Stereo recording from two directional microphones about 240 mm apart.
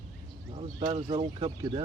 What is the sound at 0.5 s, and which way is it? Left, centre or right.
Speech, right.